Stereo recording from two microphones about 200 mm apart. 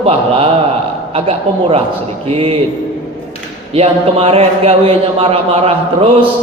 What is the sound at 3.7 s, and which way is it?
Speech, 30° right (ahead or behind).